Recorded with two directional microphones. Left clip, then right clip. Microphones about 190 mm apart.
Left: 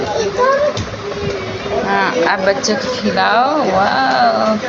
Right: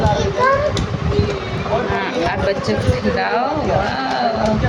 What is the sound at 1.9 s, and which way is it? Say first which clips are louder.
Speech: left 5 dB; 5° left (ahead or behind).